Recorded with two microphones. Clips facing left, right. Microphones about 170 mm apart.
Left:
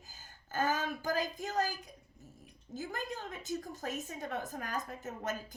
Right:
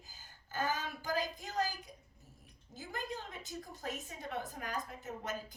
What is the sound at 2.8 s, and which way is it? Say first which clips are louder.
A woman's voice: left 3 dB; 45° left (ahead or behind).